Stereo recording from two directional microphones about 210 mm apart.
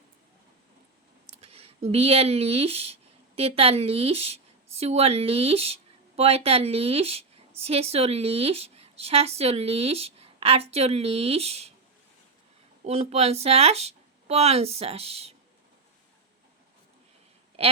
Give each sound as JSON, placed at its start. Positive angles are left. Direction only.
{"t": 1.3, "sound": "speech", "side_deg": -30}
{"t": 12.8, "sound": "speech", "side_deg": -30}
{"t": 17.6, "sound": "a sound", "side_deg": -30}